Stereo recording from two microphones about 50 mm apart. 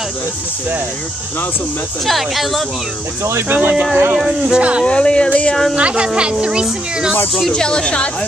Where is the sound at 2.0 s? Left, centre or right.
Centre.